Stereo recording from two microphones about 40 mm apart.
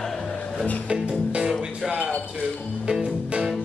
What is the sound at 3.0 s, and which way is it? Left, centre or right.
Music, right.